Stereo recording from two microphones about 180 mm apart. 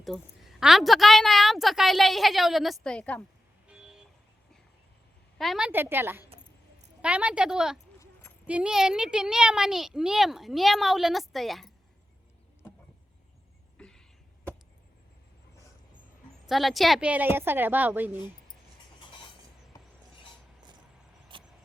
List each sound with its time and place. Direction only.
0.0 s a woman's voice: centre (ahead or behind)
3.7 s vehicle: 5° right (ahead or behind)
5.4 s a woman's voice: centre (ahead or behind)
13.7 s a sound: 5° left (ahead or behind)
16.5 s a woman's voice: centre (ahead or behind)
21.3 s vehicle: 30° right (ahead or behind)